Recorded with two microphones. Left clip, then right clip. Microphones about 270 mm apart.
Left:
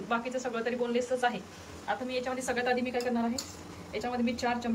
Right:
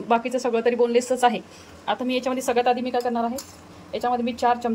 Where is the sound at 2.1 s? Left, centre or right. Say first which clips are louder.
Right 9 dB; centre.